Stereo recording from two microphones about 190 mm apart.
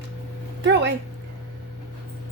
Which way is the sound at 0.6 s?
65° right (ahead or behind).